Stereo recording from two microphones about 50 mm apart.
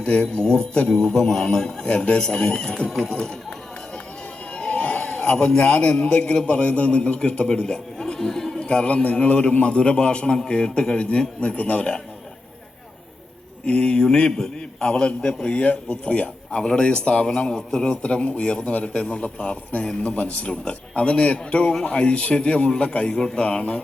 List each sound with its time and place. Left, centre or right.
0.0 s speech: left
1.8 s a man's voice: left
4.5 s a sound: left
5.5 s a man's voice: left
13.7 s a man's voice: left